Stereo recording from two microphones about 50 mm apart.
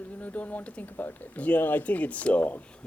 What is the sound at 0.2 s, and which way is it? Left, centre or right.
Speech, left.